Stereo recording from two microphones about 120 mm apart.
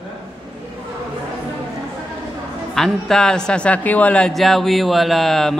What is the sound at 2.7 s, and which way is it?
Speech, 5° left (ahead or behind).